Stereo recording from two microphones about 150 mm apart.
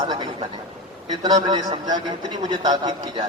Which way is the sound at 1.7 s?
30° right (ahead or behind).